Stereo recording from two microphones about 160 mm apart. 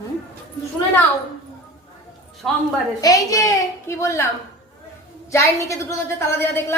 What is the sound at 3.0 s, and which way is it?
A woman's voice, 20° left (ahead or behind).